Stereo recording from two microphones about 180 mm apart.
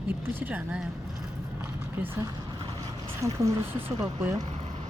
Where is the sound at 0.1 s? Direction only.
10° right (ahead or behind).